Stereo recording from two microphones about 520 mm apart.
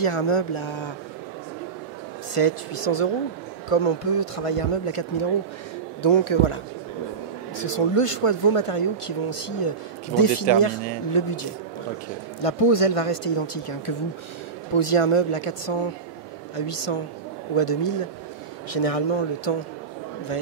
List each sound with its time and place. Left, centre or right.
0.0 s speech: left
2.3 s speech: left
12.4 s speech: left
18.7 s speech: left